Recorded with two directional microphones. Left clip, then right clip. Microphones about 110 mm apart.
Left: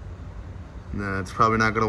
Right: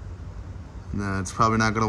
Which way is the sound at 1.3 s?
50° right (ahead or behind).